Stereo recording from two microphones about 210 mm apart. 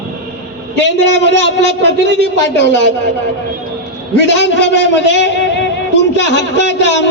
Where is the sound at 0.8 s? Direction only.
55° left (ahead or behind).